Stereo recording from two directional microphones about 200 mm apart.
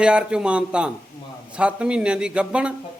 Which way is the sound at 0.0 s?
5° right (ahead or behind).